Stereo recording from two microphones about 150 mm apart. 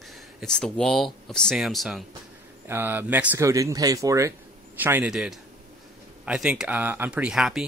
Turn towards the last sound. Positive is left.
turn(degrees=-5)  # may be behind; listen again after turning